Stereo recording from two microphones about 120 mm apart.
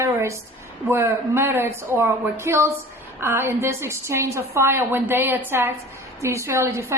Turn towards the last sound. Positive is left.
turn(degrees=-20)  # may be behind; listen again after turning